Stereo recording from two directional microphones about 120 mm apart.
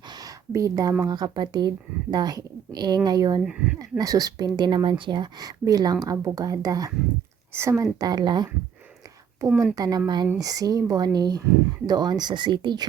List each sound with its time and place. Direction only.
0.2 s speech: 30° right (ahead or behind)
3.4 s speech: 5° right (ahead or behind)
3.8 s a woman's voice: 30° right (ahead or behind)
7.9 s speech: 35° right (ahead or behind)
9.5 s speech: 5° right (ahead or behind)
9.7 s speech: 30° right (ahead or behind)